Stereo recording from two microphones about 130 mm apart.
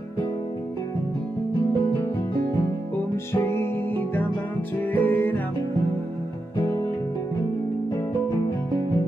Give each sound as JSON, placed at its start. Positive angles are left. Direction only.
{"t": 5.0, "sound": "music", "side_deg": 15}